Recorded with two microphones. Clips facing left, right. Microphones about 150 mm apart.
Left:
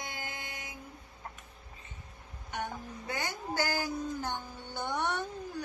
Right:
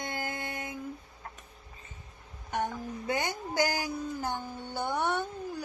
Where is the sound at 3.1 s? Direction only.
15° right (ahead or behind).